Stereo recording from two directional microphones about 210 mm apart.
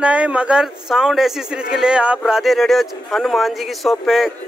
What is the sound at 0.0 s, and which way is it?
Speech, 5° right (ahead or behind).